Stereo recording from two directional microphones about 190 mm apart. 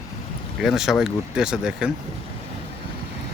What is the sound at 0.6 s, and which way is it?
Speech, centre (ahead or behind).